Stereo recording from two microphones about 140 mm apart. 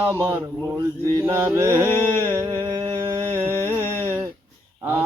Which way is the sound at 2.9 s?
15° right (ahead or behind).